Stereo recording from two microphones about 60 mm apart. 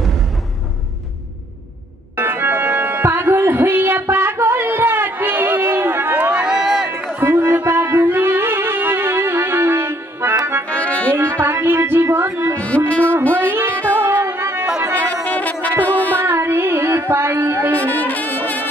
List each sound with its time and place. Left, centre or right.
2.1 s organ: right
6.3 s run: centre
7.2 s music: right
10.7 s music: left
11.1 s music: right
12.5 s music: left
13.3 s music: right
15.2 s music: left
16.2 s music: right
17.7 s brass instrument: left